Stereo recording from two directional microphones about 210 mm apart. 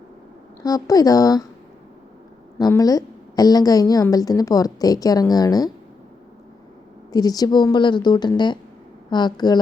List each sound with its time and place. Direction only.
0.6 s a woman's voice: 15° left (ahead or behind)
2.6 s a woman's voice: 15° left (ahead or behind)
7.1 s a woman's voice: 20° left (ahead or behind)